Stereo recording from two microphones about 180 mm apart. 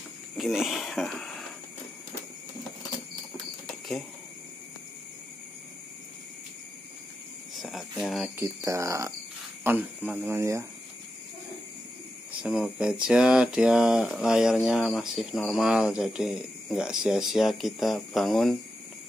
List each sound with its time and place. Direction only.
0.4 s speech: centre (ahead or behind)
7.5 s cricket: centre (ahead or behind)
8.4 s speech: 15° right (ahead or behind)
12.4 s speech: 5° right (ahead or behind)